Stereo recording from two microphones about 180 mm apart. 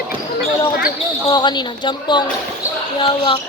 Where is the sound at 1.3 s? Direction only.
25° left (ahead or behind).